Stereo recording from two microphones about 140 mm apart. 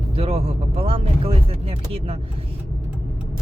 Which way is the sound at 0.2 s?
45° right (ahead or behind).